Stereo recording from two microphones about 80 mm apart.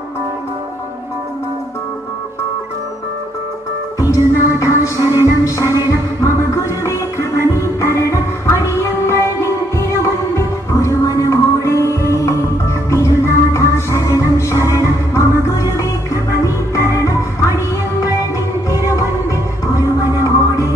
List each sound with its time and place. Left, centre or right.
4.1 s music: left
5.0 s music: right
6.2 s music: left
20.2 s music: left